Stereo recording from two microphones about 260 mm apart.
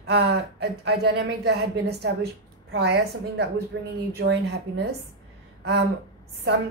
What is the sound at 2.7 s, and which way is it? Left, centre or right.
A woman's voice, right.